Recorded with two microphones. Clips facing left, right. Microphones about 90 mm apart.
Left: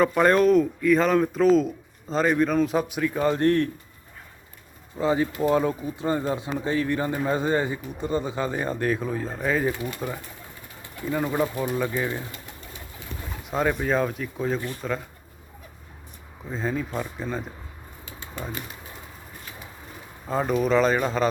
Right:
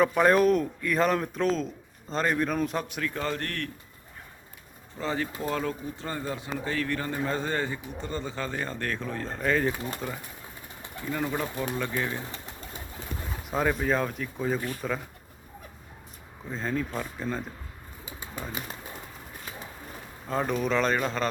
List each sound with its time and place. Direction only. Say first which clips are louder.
0.0 s speech: left 2 dB; centre (ahead or behind); by 3.7 s 20° left (ahead or behind)
4.9 s speech: left 8 dB; 15° left (ahead or behind)
11.1 s speech: left 5 dB; 15° left (ahead or behind)
13.5 s speech: left 2 dB; centre (ahead or behind)
16.5 s speech: left 2 dB; 5° left (ahead or behind)
18.0 s bird: left 2 dB; 5° right (ahead or behind)
20.2 s speech: left 4 dB; 5° left (ahead or behind)